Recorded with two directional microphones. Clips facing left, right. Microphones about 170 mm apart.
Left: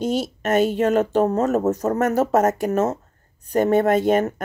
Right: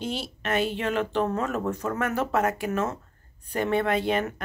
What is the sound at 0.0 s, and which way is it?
A woman's voice, 45° left (ahead or behind).